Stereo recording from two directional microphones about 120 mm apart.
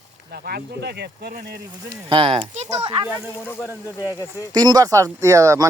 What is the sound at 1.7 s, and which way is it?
Speech, 45° right (ahead or behind).